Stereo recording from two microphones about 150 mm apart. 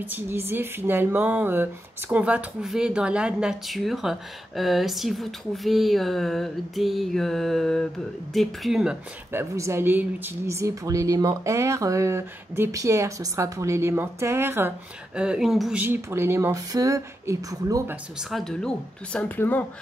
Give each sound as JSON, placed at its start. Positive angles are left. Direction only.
{"t": 0.0, "sound": "speech", "side_deg": -15}
{"t": 9.3, "sound": "speech", "side_deg": -15}
{"t": 15.1, "sound": "speech", "side_deg": -5}
{"t": 15.8, "sound": "speech", "side_deg": -15}
{"t": 18.3, "sound": "speech", "side_deg": 5}